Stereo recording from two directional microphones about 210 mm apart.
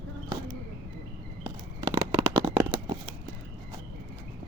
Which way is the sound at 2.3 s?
20° right (ahead or behind).